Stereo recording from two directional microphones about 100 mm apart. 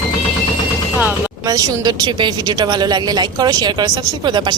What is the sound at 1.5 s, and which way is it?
A woman's voice, 40° right (ahead or behind).